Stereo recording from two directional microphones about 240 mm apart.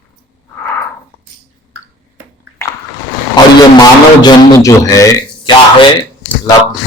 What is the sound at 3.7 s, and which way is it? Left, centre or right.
A man's voice, centre.